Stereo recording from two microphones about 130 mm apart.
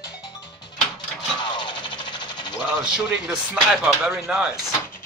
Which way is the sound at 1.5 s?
35° left (ahead or behind).